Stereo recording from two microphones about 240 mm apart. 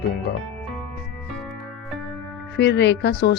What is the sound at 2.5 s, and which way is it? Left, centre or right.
Speech, left.